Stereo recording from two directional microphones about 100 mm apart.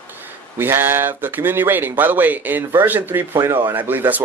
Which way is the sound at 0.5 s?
20° right (ahead or behind).